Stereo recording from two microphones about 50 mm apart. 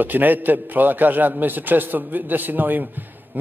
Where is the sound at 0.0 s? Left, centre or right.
Right.